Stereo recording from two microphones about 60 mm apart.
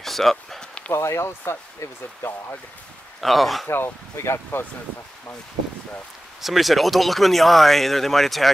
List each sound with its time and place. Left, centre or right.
0.0 s a sound: centre
0.9 s speech: left
3.2 s speech: centre
3.6 s speech: left
6.4 s speech: centre